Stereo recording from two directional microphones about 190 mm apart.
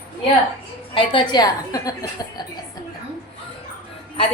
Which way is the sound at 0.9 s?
25° left (ahead or behind).